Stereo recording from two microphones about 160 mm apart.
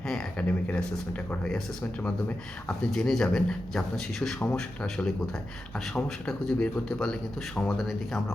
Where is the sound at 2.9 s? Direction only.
Centre (ahead or behind).